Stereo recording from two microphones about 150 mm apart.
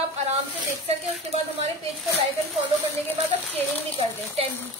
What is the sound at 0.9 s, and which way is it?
Speech, 45° right (ahead or behind).